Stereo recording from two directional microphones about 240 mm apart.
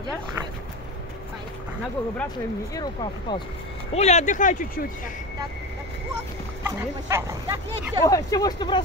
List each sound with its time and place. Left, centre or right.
2.7 s speech: centre; by 4.8 s left
6.6 s speech: centre
8.1 s speech: centre